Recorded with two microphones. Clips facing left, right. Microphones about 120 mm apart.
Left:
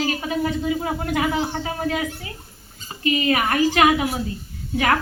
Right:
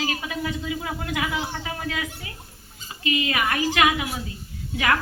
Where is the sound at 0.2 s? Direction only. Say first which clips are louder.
Left 6 dB; 40° left (ahead or behind).